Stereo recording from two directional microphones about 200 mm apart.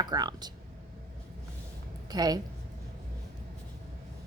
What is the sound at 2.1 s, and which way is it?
Speech, 20° right (ahead or behind).